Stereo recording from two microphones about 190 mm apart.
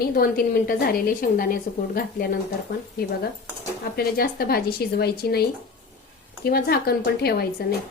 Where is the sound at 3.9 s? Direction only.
50° left (ahead or behind).